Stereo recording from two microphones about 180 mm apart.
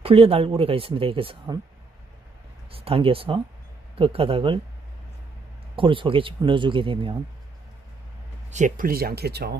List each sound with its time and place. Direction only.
0.0 s speech: 35° right (ahead or behind)
2.7 s speech: 30° right (ahead or behind)
5.8 s speech: 30° right (ahead or behind)
8.5 s speech: 45° right (ahead or behind); by 9.6 s 65° right (ahead or behind)